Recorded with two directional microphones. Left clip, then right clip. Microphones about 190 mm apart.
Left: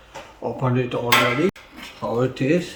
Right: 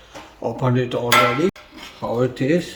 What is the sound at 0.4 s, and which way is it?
Speech, 40° right (ahead or behind).